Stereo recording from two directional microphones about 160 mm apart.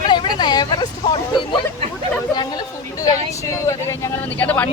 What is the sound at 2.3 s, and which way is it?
Chatter, 25° left (ahead or behind).